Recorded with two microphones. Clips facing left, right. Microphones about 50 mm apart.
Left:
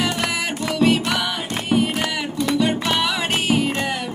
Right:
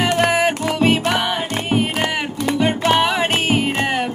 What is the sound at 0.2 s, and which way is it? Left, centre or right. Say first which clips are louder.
Music: right 7 dB; right.